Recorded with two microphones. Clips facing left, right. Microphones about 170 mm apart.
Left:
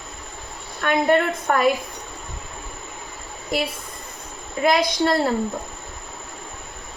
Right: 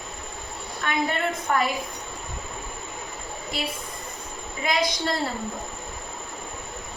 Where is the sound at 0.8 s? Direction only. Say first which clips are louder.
Left 7 dB; 60° left (ahead or behind).